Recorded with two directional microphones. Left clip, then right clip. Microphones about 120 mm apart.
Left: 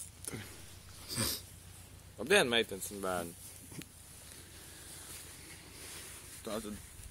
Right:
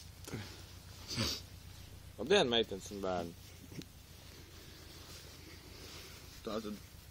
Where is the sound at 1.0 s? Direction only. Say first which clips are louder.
Even; 30° left (ahead or behind).